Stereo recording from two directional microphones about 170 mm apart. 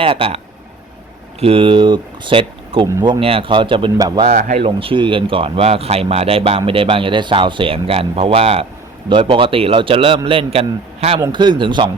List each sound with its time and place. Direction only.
0.0 s speech: 35° right (ahead or behind)
4.3 s speech: 50° right (ahead or behind); by 11.9 s 25° right (ahead or behind)